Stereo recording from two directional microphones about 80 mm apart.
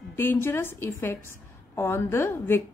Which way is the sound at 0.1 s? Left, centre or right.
Left.